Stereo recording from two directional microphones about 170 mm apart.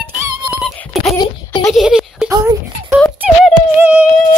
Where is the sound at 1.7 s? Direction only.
Centre (ahead or behind).